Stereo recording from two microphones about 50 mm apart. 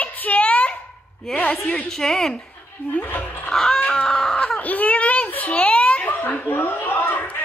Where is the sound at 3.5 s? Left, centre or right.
Centre.